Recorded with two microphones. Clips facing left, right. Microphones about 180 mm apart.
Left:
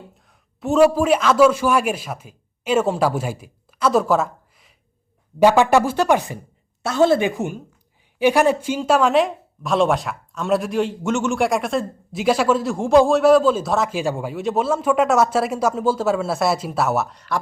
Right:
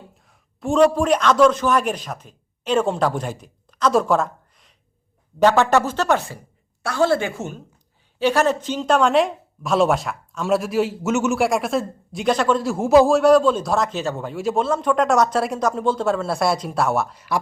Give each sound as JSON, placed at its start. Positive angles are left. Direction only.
{"t": 0.2, "sound": "a man's voice", "side_deg": 0}